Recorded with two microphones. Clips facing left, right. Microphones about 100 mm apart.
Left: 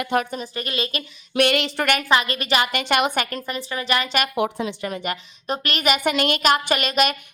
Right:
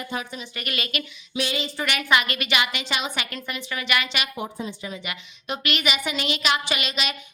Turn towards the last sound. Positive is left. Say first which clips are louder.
# left 8 dB
turn(degrees=50)  # may be behind; listen again after turning